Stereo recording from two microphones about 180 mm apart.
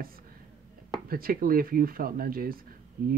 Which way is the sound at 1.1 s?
55° right (ahead or behind).